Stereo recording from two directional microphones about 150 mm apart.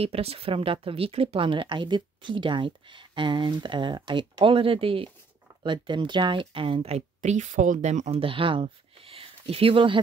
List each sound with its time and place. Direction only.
0.0 s speech: 40° right (ahead or behind)